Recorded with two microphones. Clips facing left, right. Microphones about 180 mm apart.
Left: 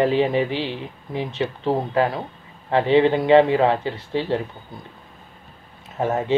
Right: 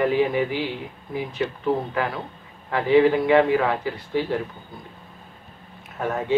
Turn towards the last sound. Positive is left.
turn(degrees=25)  # may be behind; listen again after turning